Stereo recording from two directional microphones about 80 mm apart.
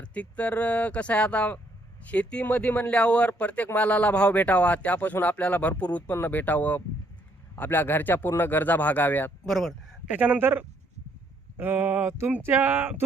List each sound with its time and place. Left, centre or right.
0.0 s speech: centre
9.5 s speech: centre
10.1 s a sound: centre